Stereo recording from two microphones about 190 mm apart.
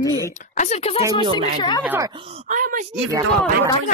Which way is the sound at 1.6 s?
25° left (ahead or behind).